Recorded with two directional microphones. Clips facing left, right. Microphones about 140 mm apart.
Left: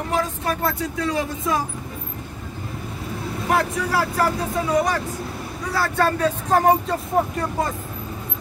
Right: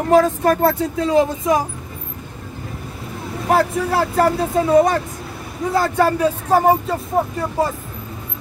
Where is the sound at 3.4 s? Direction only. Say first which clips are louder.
Right 5 dB; 30° right (ahead or behind); by 7.0 s 5° right (ahead or behind).